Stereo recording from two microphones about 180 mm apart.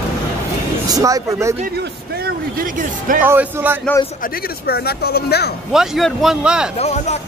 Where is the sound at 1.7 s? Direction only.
55° right (ahead or behind).